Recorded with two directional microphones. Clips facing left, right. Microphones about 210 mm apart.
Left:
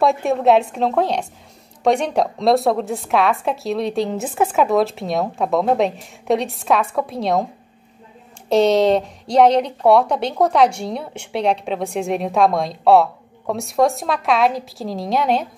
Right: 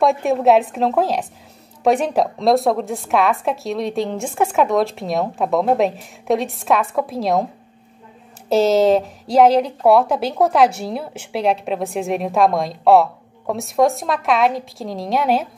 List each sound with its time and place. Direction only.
0.0 s a woman's voice: centre (ahead or behind)
8.5 s a woman's voice: centre (ahead or behind)